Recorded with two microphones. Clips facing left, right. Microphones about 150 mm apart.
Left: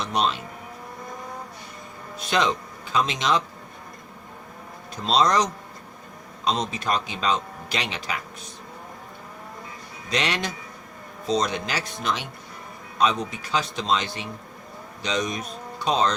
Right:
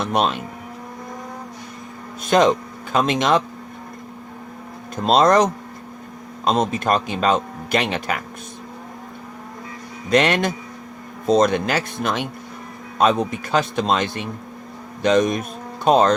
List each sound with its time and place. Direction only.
0.0 s speech: 50° right (ahead or behind)
2.2 s speech: 45° right (ahead or behind)
5.0 s speech: 50° right (ahead or behind)
10.1 s speech: 55° right (ahead or behind)